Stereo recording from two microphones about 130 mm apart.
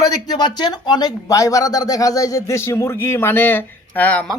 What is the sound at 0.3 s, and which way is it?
Speech, 35° left (ahead or behind).